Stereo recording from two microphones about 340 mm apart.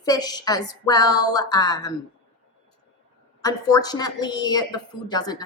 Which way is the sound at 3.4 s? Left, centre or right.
Centre.